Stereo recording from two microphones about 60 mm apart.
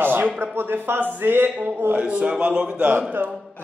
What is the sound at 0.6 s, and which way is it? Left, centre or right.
Speech, right.